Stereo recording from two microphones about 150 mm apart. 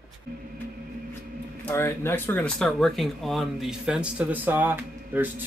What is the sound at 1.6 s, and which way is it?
Speech, 15° left (ahead or behind).